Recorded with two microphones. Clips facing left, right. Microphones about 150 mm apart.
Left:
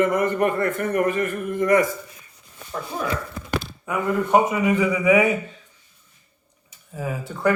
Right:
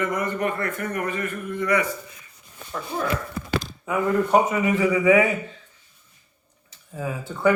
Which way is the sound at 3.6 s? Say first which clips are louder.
Right 2 dB; 5° left (ahead or behind).